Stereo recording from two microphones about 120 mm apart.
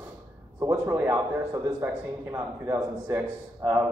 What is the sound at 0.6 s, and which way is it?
Speech, 20° right (ahead or behind).